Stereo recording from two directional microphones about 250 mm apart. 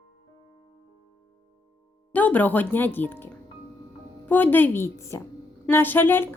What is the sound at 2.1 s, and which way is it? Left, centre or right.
Speech, centre.